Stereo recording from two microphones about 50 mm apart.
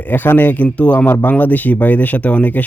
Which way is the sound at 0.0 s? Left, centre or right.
Left.